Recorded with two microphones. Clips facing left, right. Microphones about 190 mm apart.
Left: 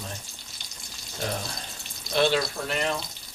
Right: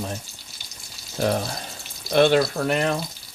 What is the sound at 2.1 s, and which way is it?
Speech, 55° right (ahead or behind).